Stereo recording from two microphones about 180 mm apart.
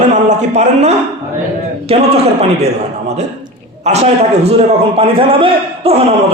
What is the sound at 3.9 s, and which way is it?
A man's voice, 40° right (ahead or behind).